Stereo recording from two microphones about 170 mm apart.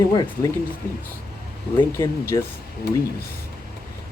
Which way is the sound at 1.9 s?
15° left (ahead or behind).